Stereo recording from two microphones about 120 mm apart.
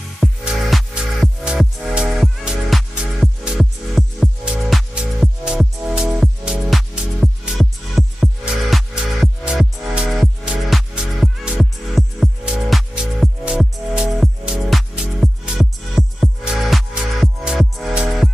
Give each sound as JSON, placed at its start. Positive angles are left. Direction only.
{"t": 0.2, "sound": "music", "side_deg": 0}